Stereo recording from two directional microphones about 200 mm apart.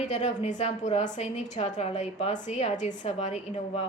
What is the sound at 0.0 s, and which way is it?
A woman's voice, 35° left (ahead or behind).